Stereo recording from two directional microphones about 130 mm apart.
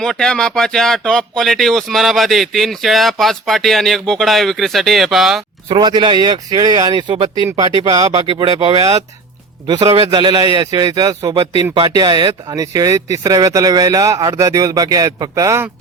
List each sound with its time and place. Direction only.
0.0 s speech: 5° left (ahead or behind)
5.7 s a man's voice: 35° right (ahead or behind)